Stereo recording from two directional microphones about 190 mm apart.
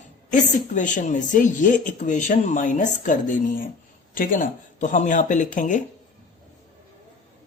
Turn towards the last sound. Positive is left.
turn(degrees=40)  # may be behind; listen again after turning